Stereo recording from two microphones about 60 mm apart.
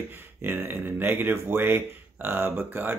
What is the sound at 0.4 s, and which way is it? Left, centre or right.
Speech, right.